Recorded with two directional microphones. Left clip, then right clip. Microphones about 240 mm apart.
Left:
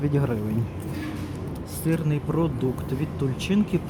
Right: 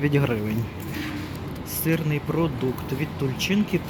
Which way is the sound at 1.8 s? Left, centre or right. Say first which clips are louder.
Right 2 dB; centre.